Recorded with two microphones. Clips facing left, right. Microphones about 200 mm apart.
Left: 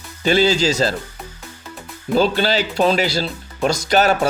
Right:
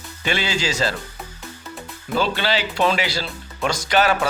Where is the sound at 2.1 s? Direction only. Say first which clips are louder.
Left 5 dB; 40° left (ahead or behind).